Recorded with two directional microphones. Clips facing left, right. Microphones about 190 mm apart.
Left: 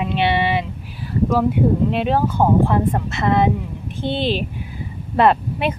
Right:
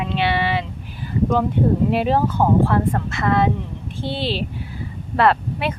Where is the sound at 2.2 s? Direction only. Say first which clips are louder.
Left 1 dB; 15° left (ahead or behind).